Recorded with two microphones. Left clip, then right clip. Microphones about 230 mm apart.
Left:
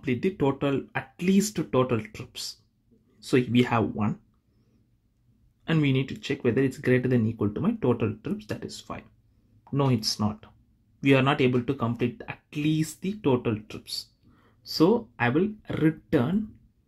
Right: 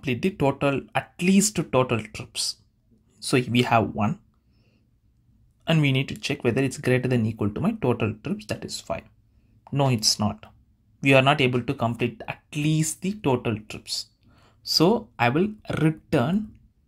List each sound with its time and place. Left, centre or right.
0.0 s speech: right
5.6 s speech: right